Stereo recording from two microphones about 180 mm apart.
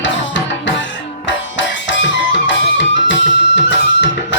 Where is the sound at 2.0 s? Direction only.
90° left.